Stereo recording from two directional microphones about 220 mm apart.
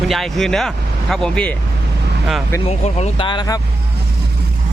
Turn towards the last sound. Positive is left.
turn(degrees=20)  # may be behind; listen again after turning